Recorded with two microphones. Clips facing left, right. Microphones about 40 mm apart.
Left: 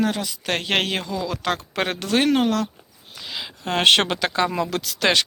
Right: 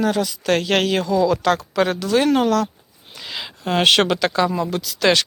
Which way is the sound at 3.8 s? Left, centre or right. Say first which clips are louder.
Right 1 dB; left.